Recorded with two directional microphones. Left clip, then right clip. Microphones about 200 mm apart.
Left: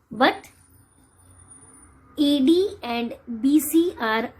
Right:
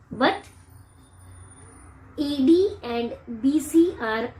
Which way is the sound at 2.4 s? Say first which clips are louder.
Right 1 dB; 55° left (ahead or behind).